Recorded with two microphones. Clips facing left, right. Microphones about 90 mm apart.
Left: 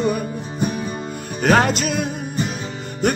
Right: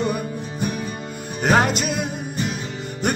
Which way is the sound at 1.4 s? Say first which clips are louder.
Left 2 dB; 20° right (ahead or behind).